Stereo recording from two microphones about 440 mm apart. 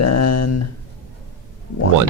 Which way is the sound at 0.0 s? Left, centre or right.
Left.